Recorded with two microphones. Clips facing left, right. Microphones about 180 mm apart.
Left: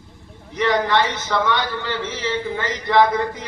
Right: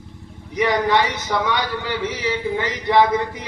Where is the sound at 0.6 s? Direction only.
15° right (ahead or behind).